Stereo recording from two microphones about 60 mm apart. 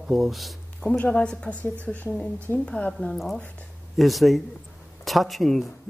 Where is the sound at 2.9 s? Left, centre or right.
Centre.